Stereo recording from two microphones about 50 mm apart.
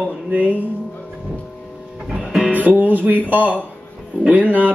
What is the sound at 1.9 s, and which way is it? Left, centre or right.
Music, centre.